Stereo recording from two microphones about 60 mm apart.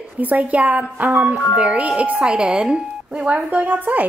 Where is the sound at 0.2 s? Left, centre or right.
Right.